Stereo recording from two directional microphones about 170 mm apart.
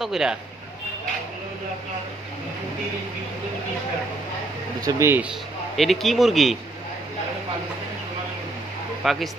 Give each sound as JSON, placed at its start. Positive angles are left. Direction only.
{"t": 0.0, "sound": "speech", "side_deg": -5}
{"t": 4.8, "sound": "speech", "side_deg": -15}
{"t": 5.8, "sound": "speech", "side_deg": 0}
{"t": 9.0, "sound": "speech", "side_deg": 0}